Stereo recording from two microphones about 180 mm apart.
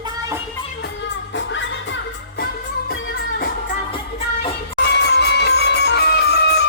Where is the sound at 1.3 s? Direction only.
90° left.